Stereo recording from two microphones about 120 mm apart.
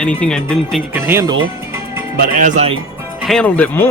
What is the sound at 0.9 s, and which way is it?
Speech, 20° right (ahead or behind).